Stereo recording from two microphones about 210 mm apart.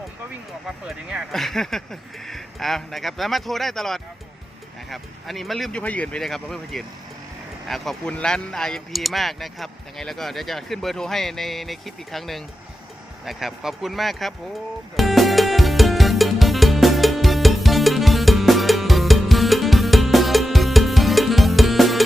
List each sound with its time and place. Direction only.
0.9 s speech: 5° right (ahead or behind)
14.9 s music: centre (ahead or behind)